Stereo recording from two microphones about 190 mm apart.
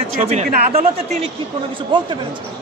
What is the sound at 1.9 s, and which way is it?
Speech, 25° right (ahead or behind).